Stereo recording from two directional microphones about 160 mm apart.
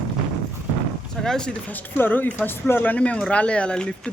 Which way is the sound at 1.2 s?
5° left (ahead or behind).